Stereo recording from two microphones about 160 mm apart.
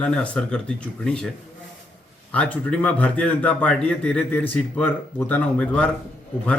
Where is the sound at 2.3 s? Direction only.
10° left (ahead or behind).